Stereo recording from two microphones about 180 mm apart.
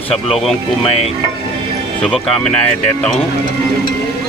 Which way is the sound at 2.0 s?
Centre (ahead or behind).